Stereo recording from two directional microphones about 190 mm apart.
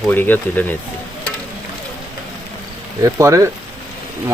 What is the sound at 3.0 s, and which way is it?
Speech, 15° right (ahead or behind).